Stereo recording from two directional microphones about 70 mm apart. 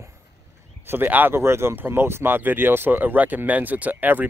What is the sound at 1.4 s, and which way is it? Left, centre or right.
Speech, right.